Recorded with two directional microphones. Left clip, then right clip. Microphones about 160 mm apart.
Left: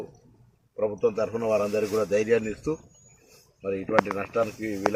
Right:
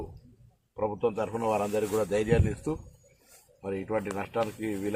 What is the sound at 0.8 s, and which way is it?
A man's voice, 20° right (ahead or behind).